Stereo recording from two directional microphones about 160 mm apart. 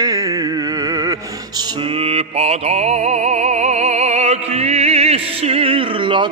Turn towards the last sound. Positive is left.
turn(degrees=-30)  # may be behind; listen again after turning